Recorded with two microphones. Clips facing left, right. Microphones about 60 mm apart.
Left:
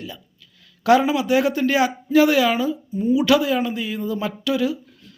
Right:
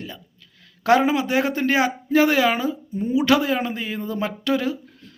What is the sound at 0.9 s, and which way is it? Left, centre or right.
Speech, right.